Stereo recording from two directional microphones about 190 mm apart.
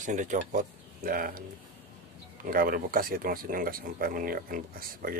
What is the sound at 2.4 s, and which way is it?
Speech, 50° right (ahead or behind).